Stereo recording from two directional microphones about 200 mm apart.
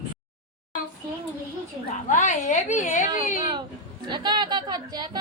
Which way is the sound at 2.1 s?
40° left (ahead or behind).